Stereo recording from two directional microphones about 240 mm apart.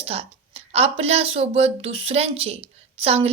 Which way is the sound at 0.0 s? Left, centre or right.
Right.